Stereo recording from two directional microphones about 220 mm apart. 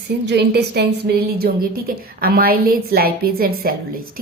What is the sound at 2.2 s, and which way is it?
Speech, 45° right (ahead or behind).